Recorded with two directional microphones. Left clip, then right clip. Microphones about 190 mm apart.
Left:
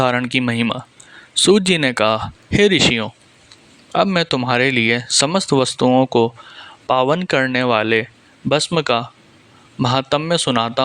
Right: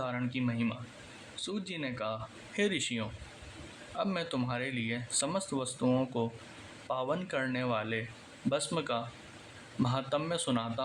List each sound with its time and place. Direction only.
0.0 s speech: 60° left (ahead or behind)